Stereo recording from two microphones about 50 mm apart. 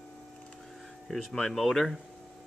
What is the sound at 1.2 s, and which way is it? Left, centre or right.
Speech, centre.